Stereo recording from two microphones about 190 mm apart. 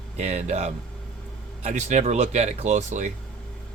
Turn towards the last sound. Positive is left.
turn(degrees=-40)  # may be behind; listen again after turning